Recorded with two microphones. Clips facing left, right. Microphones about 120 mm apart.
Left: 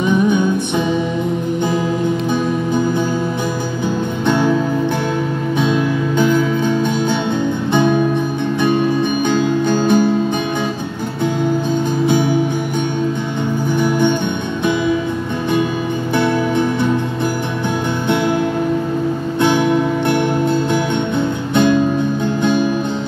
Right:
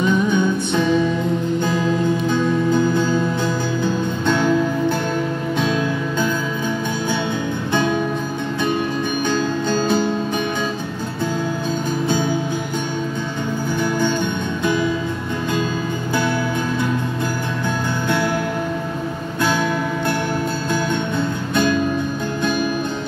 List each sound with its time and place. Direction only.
0.0 s music: 15° left (ahead or behind)
2.3 s music: 15° left (ahead or behind)
5.6 s music: 20° left (ahead or behind)
7.7 s music: 20° left (ahead or behind)
9.3 s music: 15° left (ahead or behind)
13.7 s music: 20° left (ahead or behind)
19.4 s music: 20° left (ahead or behind)
21.2 s music: 20° left (ahead or behind)